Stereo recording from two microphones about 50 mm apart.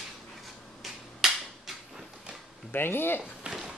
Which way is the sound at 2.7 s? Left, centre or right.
Left.